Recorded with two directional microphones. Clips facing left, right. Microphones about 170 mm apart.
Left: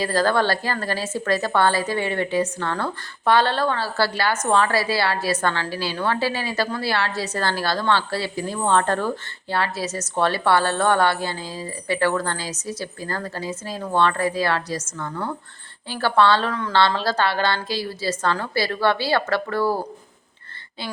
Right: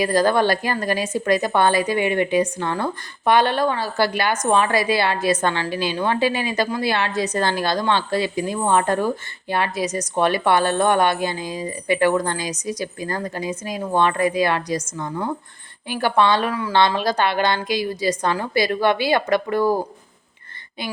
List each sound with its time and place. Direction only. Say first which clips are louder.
0.0 s a woman's voice: right 3 dB; 15° right (ahead or behind)